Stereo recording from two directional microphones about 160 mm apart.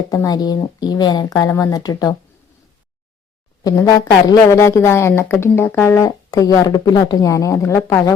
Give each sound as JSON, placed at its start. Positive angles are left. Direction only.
{"t": 0.1, "sound": "speech", "side_deg": 20}
{"t": 3.6, "sound": "speech", "side_deg": 20}